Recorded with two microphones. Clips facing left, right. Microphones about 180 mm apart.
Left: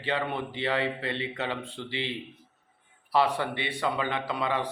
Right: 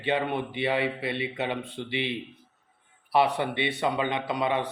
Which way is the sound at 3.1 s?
15° right (ahead or behind).